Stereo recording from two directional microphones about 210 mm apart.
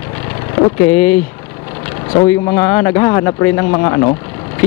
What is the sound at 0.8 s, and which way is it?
Speech, 10° left (ahead or behind).